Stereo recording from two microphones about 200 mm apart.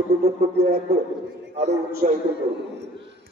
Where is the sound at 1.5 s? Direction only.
35° right (ahead or behind).